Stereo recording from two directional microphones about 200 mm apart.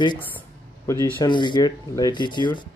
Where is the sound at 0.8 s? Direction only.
15° left (ahead or behind).